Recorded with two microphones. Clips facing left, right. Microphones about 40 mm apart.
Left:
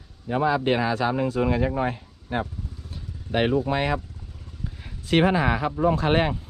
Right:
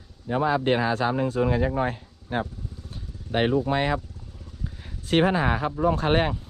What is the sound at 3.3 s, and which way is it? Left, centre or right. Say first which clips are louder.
Speech: left 1 dB; left.